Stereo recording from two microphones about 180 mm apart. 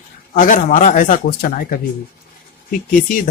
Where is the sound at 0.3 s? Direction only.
45° left (ahead or behind).